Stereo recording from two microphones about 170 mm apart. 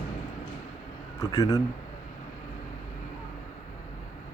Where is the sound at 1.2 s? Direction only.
20° left (ahead or behind).